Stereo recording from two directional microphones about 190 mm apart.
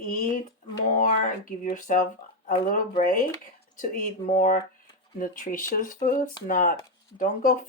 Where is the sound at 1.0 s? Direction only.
45° left (ahead or behind).